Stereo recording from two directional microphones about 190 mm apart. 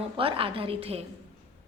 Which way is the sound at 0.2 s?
30° right (ahead or behind).